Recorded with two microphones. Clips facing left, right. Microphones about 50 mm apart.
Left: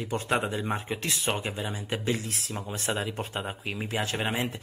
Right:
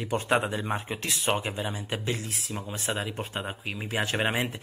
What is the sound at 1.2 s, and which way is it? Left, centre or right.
Speech, centre.